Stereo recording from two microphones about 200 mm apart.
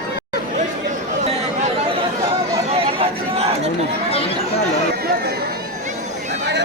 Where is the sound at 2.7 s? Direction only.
30° right (ahead or behind).